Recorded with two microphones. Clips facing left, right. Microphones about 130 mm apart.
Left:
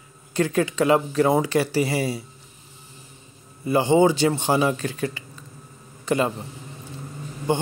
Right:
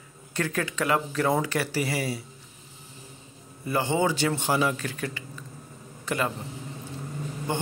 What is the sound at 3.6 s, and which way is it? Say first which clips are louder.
A man's voice: left 7 dB; 20° left (ahead or behind).